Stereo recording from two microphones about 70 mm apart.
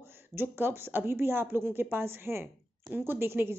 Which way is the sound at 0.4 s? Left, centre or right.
Right.